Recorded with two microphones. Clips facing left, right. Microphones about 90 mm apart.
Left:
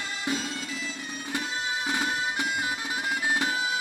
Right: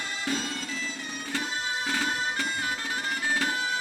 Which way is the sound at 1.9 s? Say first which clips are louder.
Even; 15° left (ahead or behind).